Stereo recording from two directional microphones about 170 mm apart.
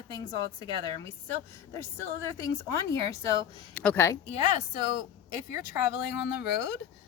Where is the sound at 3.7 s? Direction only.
10° left (ahead or behind).